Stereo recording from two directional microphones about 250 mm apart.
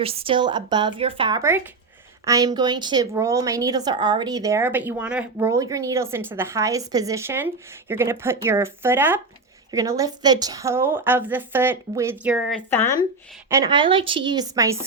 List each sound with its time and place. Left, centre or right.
0.0 s a woman's voice: right; by 12.8 s centre
13.5 s a woman's voice: centre